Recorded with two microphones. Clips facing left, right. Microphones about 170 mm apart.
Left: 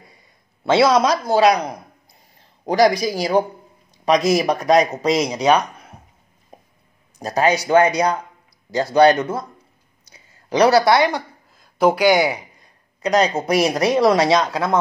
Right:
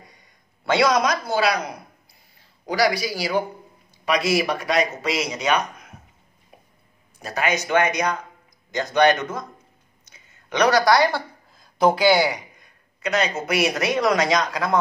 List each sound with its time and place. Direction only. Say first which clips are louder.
0.7 s speech: left 4 dB; 30° left (ahead or behind)
2.9 s speech: left 4 dB; 5° right (ahead or behind)
3.2 s speech: left 5 dB; 40° left (ahead or behind)
6.5 s a sound: left 6 dB; 40° left (ahead or behind)
7.2 s speech: left 6 dB; 40° left (ahead or behind)
10.0 s a sound: left 6 dB; 35° left (ahead or behind)
11.1 s a woman's voice: left 2 dB; 10° left (ahead or behind)
13.0 s speech: left 6 dB; 35° left (ahead or behind)